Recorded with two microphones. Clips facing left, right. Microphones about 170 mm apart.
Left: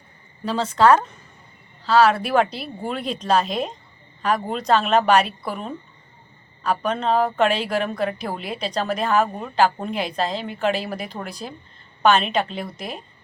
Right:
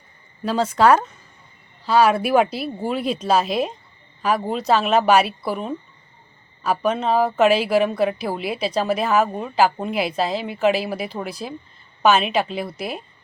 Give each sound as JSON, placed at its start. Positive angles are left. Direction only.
{"t": 0.4, "sound": "speech", "side_deg": -10}